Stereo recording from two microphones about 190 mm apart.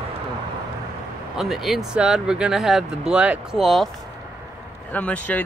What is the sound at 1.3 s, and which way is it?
Speech, centre (ahead or behind).